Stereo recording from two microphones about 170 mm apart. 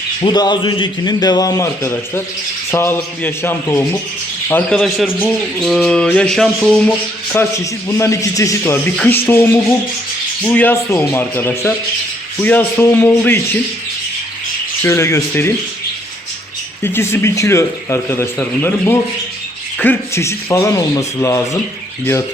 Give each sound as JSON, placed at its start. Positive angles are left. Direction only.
{"t": 0.2, "sound": "a man's voice", "side_deg": 25}
{"t": 4.8, "sound": "speech", "side_deg": -5}
{"t": 7.3, "sound": "a man's voice", "side_deg": 15}
{"t": 14.8, "sound": "a man's voice", "side_deg": 15}
{"t": 16.8, "sound": "a man's voice", "side_deg": 15}